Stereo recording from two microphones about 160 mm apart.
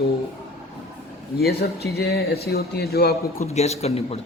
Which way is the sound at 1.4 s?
80° left.